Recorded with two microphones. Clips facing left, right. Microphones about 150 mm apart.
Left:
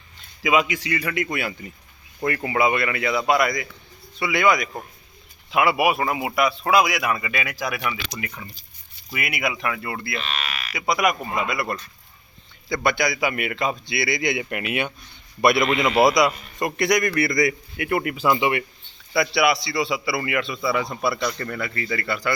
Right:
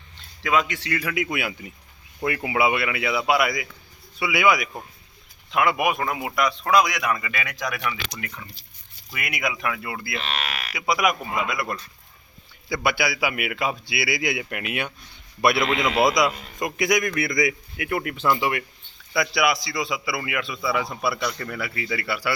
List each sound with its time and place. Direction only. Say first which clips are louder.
0.4 s a man's voice: left 2 dB; 10° left (ahead or behind); by 4.7 s 5° right (ahead or behind)
5.5 s a man's voice: left 2 dB; 5° left (ahead or behind)
10.2 s a sound: right 1 dB; 70° right (ahead or behind)
10.8 s a man's voice: left 1 dB; centre (ahead or behind)